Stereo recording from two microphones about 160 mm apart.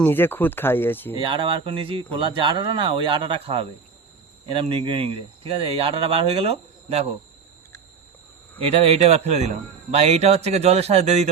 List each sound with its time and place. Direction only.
0.0 s speech: 10° left (ahead or behind)
1.1 s speech: 30° right (ahead or behind)
8.6 s speech: 40° right (ahead or behind)